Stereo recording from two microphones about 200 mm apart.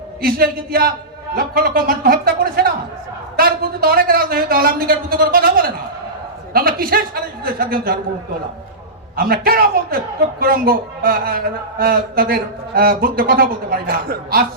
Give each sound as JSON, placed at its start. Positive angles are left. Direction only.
{"t": 0.2, "sound": "a man's voice", "side_deg": -50}
{"t": 9.1, "sound": "a man's voice", "side_deg": -50}